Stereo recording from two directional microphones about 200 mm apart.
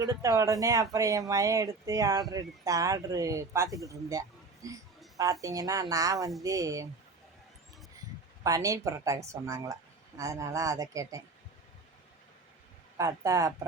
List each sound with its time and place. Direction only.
0.0 s speech: 20° right (ahead or behind)
8.4 s speech: 15° right (ahead or behind)
13.0 s speech: 15° right (ahead or behind)